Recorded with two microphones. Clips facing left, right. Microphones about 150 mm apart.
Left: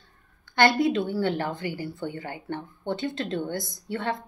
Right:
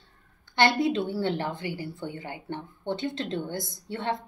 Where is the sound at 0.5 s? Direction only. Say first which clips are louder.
Left 2 dB; 25° right (ahead or behind).